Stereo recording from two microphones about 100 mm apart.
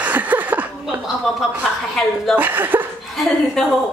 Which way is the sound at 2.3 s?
20° right (ahead or behind).